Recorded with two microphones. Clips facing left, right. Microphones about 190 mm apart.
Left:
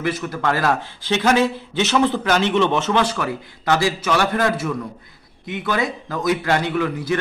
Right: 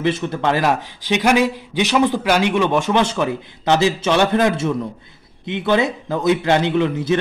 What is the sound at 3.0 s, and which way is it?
A man's voice, 20° right (ahead or behind).